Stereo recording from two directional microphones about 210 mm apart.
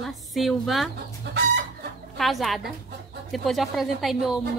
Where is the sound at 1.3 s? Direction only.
50° right (ahead or behind).